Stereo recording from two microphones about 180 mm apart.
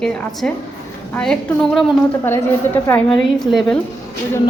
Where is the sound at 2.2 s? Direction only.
10° left (ahead or behind).